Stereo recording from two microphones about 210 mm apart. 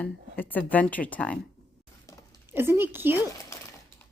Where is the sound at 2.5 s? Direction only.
10° right (ahead or behind).